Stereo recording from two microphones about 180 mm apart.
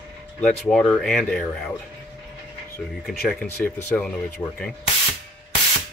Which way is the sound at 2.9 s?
Centre (ahead or behind).